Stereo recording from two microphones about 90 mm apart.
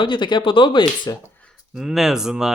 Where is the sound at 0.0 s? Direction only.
65° left (ahead or behind).